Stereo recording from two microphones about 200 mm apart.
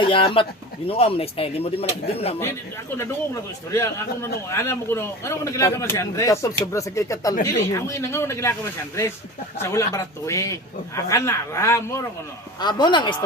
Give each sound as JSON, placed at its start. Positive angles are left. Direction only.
{"t": 0.0, "sound": "speech", "side_deg": 25}
{"t": 3.7, "sound": "a man's voice", "side_deg": 15}
{"t": 9.6, "sound": "a man's voice", "side_deg": 15}